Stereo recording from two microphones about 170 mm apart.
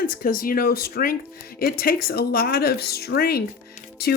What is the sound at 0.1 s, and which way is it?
Speech, 55° left (ahead or behind).